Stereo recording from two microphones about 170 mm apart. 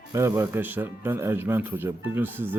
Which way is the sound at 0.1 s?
15° right (ahead or behind).